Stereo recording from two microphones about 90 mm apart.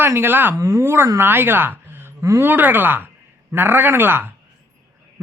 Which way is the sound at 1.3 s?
25° right (ahead or behind).